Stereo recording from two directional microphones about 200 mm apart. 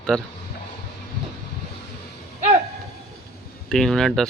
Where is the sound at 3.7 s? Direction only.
Centre (ahead or behind).